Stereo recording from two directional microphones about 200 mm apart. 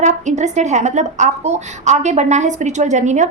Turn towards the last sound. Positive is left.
turn(degrees=-35)  # may be behind; listen again after turning